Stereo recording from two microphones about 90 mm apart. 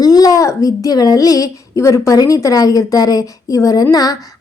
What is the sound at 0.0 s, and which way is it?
A woman's voice, 45° left (ahead or behind).